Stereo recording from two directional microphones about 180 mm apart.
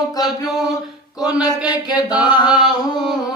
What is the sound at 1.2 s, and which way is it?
Mantra, 20° left (ahead or behind).